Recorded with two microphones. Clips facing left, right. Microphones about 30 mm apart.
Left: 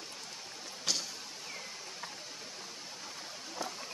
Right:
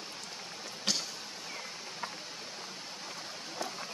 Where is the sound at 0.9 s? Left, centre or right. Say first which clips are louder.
Right 1 dB; right.